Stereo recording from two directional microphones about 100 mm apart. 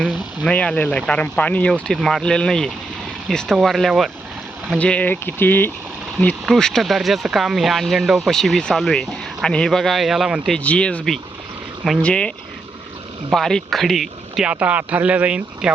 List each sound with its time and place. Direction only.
0.4 s speech: 10° left (ahead or behind)
4.7 s speech: 10° left (ahead or behind)
6.4 s speech: 5° left (ahead or behind)
10.6 s speech: 10° left (ahead or behind)
13.3 s speech: 5° left (ahead or behind)